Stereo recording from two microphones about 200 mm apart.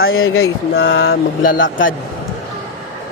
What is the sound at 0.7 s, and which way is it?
Vehicle, 65° left (ahead or behind).